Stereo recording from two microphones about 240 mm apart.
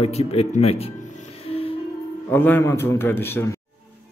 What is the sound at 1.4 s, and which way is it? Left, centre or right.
Music, left.